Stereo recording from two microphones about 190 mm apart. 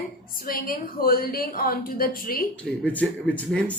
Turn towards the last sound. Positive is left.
turn(degrees=10)  # may be behind; listen again after turning